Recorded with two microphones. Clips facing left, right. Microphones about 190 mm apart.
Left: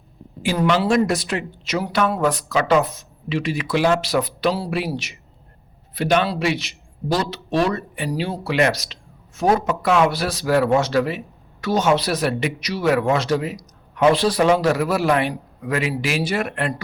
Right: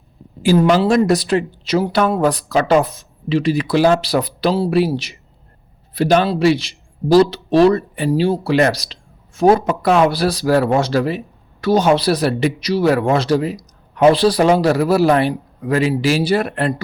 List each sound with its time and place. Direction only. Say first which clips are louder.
0.4 s speech: right 6 dB; 30° right (ahead or behind)